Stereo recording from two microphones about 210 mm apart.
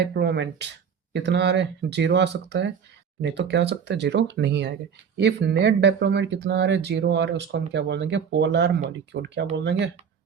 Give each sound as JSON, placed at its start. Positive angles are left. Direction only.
{"t": 0.0, "sound": "speech", "side_deg": -50}